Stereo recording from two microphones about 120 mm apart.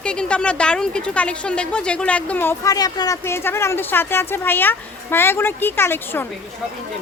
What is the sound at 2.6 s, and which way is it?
Speech, 30° left (ahead or behind).